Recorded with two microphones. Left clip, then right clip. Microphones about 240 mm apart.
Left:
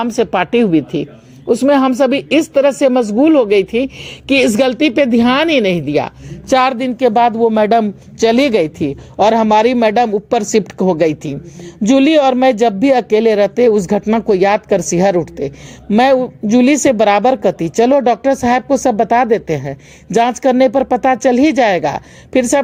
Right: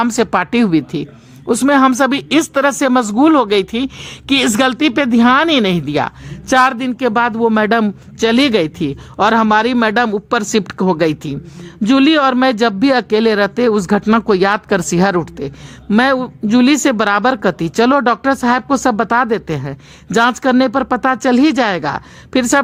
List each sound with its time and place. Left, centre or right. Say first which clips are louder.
0.0 s speech: even; right
1.5 s a man's voice: even; right
7.3 s speech: left 2 dB; right
7.7 s speech: left 2 dB; centre